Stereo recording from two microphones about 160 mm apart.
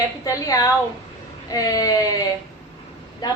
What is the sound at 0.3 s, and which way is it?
A woman's voice, 20° left (ahead or behind).